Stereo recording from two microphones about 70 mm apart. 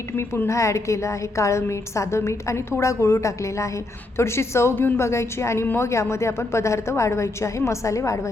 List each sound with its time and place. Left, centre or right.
0.2 s a woman's voice: left